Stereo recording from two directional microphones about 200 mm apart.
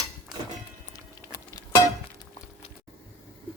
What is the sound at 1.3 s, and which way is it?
Music, 15° left (ahead or behind).